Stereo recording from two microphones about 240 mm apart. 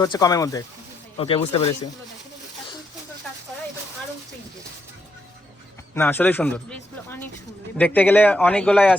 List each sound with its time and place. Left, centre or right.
0.0 s speech: centre
5.9 s speech: centre